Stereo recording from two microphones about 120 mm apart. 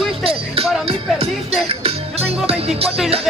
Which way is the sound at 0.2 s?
50° right (ahead or behind).